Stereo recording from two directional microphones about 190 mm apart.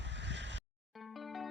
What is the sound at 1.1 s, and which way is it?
Music, centre (ahead or behind).